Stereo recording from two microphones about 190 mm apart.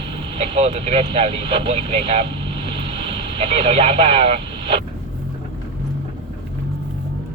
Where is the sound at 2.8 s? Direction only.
30° right (ahead or behind).